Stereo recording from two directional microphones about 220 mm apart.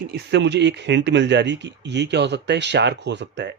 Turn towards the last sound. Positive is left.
turn(degrees=-55)  # may be behind; listen again after turning